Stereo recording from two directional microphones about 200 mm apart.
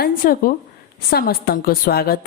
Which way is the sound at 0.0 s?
45° left (ahead or behind).